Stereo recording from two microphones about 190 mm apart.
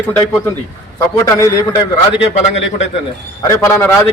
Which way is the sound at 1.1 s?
20° left (ahead or behind).